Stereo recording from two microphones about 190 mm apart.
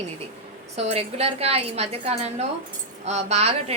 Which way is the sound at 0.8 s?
35° right (ahead or behind).